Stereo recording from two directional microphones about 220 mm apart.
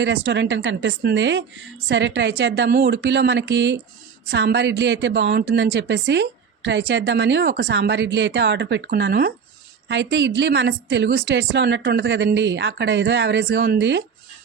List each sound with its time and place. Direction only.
0.0 s a woman's voice: 55° right (ahead or behind)